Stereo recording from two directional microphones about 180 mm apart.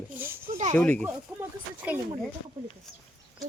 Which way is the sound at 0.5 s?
40° right (ahead or behind).